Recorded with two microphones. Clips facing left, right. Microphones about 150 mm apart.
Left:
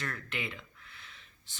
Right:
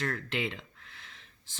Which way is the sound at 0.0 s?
90° right.